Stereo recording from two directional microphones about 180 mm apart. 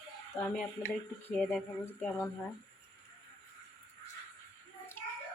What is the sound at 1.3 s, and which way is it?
Speech, 10° left (ahead or behind).